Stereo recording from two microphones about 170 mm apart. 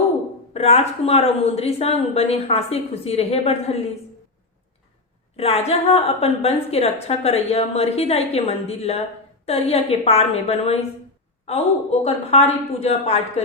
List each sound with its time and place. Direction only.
0.5 s a woman's voice: 35° left (ahead or behind)
5.4 s a woman's voice: 35° left (ahead or behind)